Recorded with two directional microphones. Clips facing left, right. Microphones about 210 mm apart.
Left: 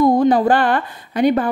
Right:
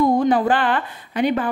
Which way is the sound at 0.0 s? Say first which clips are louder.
Left 3 dB; 40° left (ahead or behind).